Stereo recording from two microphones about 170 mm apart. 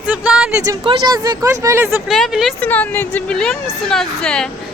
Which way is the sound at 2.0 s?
Centre (ahead or behind).